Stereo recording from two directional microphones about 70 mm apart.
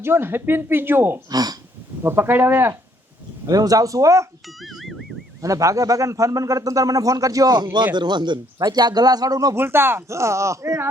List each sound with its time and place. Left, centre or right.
0.0 s speech: right
1.3 s gasp: right
2.0 s speech: right
3.4 s a man's voice: right
4.4 s speech: centre
5.4 s a man's voice: right
9.6 s speech: right